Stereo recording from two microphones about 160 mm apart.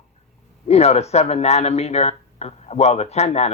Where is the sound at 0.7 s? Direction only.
40° left (ahead or behind).